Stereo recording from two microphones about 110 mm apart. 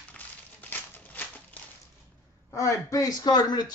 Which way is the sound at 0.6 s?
15° left (ahead or behind).